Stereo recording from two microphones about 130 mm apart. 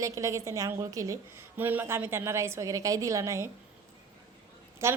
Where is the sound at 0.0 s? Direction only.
25° right (ahead or behind).